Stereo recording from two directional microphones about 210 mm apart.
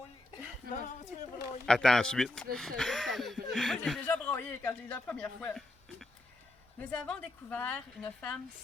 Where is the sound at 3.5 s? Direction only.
Centre (ahead or behind).